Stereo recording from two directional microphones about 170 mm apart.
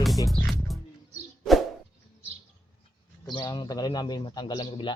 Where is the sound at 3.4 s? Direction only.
25° left (ahead or behind).